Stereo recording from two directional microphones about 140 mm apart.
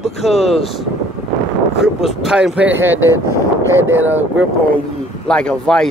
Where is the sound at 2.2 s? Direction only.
5° right (ahead or behind).